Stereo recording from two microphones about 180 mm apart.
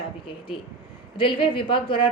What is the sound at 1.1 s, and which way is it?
Speech, 30° left (ahead or behind).